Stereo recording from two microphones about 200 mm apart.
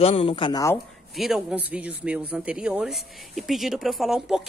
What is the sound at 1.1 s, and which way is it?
Speech, centre (ahead or behind).